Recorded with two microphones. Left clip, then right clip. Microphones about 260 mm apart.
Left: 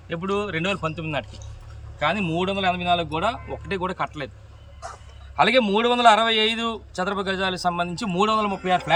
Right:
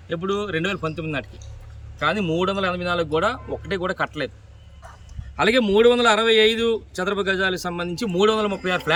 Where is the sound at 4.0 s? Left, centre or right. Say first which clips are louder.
Right 3 dB; right.